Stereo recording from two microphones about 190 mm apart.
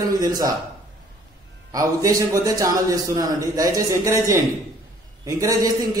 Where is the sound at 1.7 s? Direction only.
20° right (ahead or behind).